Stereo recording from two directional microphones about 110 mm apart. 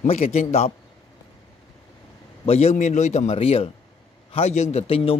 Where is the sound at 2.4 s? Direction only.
70° left (ahead or behind).